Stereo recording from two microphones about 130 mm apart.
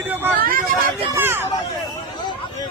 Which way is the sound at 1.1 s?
20° right (ahead or behind).